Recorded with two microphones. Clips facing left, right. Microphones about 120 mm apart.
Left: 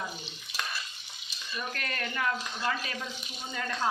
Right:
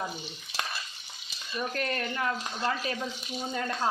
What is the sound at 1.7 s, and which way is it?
Speech, 30° right (ahead or behind).